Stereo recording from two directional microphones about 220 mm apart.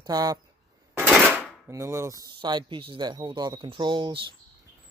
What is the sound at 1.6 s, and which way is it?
Speech, 10° right (ahead or behind).